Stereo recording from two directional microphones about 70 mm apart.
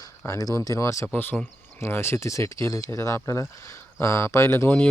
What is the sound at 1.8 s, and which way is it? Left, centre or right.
Speech, left.